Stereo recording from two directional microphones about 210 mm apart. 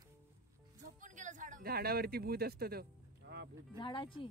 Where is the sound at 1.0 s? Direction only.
35° right (ahead or behind); by 3.5 s 50° right (ahead or behind).